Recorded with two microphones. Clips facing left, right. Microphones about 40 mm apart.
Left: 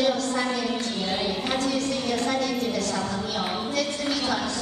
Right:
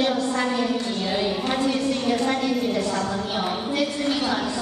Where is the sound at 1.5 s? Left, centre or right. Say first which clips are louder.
Right 2 dB; right.